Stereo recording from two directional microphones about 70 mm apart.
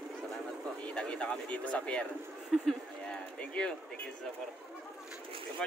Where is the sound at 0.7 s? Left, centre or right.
Centre.